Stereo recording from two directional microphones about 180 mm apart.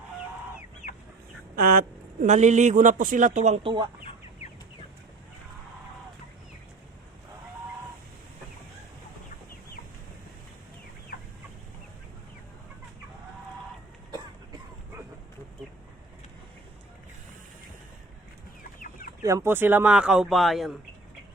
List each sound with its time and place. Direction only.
1.5 s speech: 55° right (ahead or behind)
2.2 s speech: 40° right (ahead or behind)
18.8 s chicken: 50° left (ahead or behind)
19.2 s speech: 15° right (ahead or behind); by 20.7 s centre (ahead or behind)